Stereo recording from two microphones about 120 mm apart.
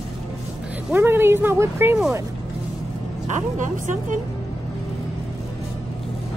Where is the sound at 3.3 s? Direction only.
90° right.